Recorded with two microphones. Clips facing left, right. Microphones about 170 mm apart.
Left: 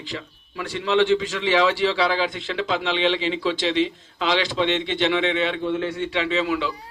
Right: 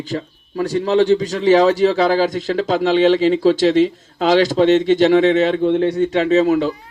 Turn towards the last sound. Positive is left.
turn(degrees=-40)  # may be behind; listen again after turning